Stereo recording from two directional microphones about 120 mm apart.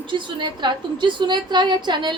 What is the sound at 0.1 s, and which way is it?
A woman's voice, 40° right (ahead or behind).